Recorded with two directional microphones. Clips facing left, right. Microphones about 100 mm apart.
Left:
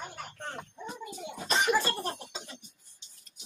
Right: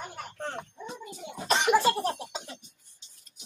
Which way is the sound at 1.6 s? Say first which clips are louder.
Right 4 dB; 70° right (ahead or behind).